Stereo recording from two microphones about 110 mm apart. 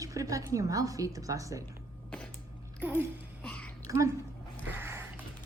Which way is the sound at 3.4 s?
10° left (ahead or behind).